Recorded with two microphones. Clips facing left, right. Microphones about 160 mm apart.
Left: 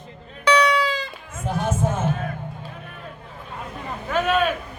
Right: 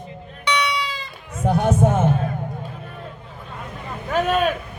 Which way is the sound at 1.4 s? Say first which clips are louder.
Right 6 dB; 70° right (ahead or behind).